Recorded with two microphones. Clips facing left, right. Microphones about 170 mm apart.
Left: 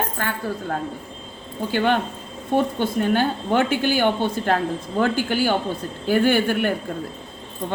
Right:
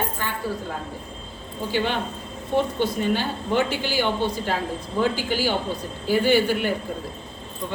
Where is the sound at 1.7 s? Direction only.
55° left (ahead or behind).